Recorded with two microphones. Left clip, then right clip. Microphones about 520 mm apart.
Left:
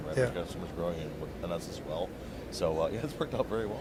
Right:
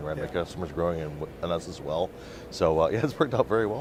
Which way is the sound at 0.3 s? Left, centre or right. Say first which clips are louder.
Right 7 dB; right.